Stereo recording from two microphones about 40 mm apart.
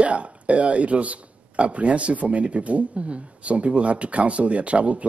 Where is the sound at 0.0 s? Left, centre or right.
Right.